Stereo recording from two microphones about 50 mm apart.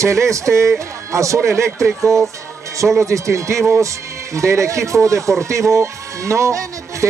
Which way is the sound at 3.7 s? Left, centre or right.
Right.